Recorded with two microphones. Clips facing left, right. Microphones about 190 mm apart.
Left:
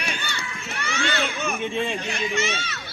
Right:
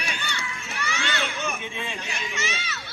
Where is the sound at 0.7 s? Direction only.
55° left (ahead or behind).